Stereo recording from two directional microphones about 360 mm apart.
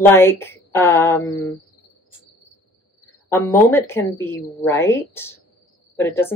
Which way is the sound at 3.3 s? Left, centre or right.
Centre.